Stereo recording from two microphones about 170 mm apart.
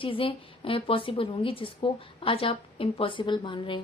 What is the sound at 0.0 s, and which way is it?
A woman's voice, 30° left (ahead or behind).